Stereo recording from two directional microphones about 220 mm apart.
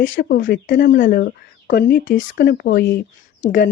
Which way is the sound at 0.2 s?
40° left (ahead or behind).